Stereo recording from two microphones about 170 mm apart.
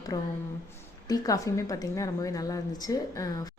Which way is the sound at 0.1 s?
20° left (ahead or behind).